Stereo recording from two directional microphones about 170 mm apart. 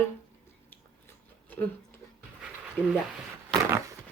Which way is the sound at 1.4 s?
10° left (ahead or behind).